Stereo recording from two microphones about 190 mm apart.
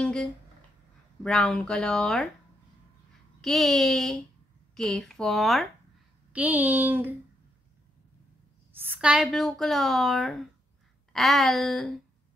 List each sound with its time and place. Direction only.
0.0 s a woman's voice: 5° left (ahead or behind)
3.3 s a woman's voice: centre (ahead or behind)
8.7 s a woman's voice: 10° right (ahead or behind)